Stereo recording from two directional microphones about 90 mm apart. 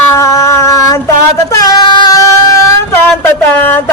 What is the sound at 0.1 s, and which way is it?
Child singing, 35° left (ahead or behind).